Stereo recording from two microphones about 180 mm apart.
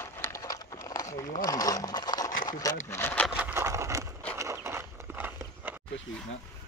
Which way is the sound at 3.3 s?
10° right (ahead or behind).